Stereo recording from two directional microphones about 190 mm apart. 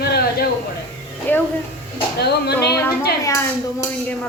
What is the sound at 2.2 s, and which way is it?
Speech, 60° left (ahead or behind).